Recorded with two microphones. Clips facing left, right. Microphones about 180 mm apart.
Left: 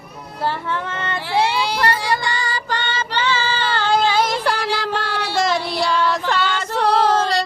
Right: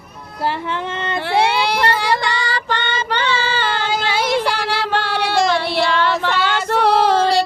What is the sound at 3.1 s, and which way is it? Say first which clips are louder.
Child singing: right 1 dB; 60° right (ahead or behind).